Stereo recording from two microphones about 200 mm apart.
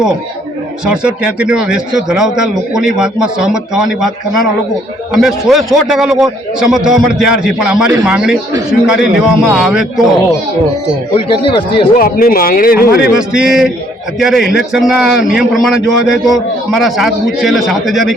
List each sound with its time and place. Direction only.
0.9 s a man's voice: 5° right (ahead or behind)
5.1 s a man's voice: centre (ahead or behind)
11.3 s speech: 25° left (ahead or behind)
11.9 s speech: 45° left (ahead or behind)
13.1 s a man's voice: 5° right (ahead or behind)